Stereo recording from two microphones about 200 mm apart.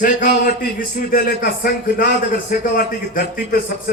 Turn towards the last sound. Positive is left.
turn(degrees=45)  # may be behind; listen again after turning